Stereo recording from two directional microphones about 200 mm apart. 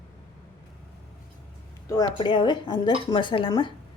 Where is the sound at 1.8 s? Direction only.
20° left (ahead or behind).